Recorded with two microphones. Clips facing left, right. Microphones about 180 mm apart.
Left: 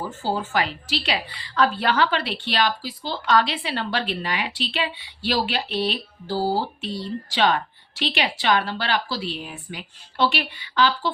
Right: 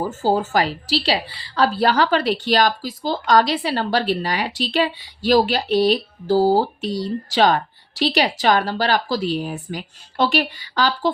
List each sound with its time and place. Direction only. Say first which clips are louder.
0.0 s a woman's voice: right 7 dB; 45° right (ahead or behind)